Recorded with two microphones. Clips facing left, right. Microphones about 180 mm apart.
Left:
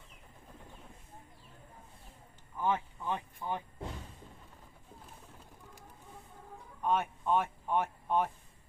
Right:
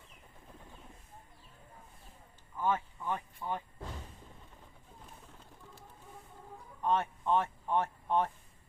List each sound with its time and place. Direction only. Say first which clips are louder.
2.6 s speech: even; 15° left (ahead or behind)
6.8 s speech: even; 5° left (ahead or behind)